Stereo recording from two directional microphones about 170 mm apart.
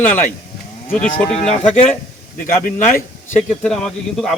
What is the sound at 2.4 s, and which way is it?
Speech, 50° left (ahead or behind).